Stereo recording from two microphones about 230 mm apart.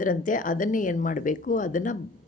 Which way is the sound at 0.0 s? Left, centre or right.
Left.